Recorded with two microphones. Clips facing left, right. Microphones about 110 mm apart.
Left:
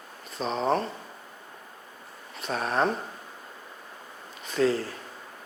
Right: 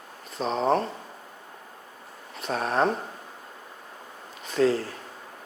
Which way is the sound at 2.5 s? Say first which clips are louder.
Right 2 dB; 45° right (ahead or behind).